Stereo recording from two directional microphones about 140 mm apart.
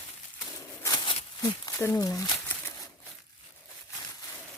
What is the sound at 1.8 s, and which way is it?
Speech, 20° left (ahead or behind).